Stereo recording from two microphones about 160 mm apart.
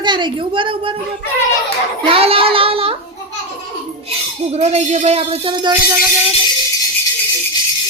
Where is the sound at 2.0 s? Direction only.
35° right (ahead or behind).